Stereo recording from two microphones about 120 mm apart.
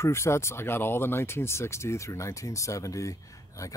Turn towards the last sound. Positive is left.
turn(degrees=25)  # may be behind; listen again after turning